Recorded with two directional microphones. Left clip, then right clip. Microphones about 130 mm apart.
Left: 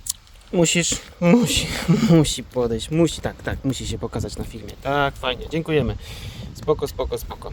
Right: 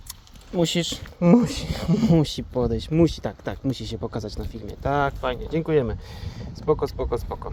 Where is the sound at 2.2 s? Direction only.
10° left (ahead or behind).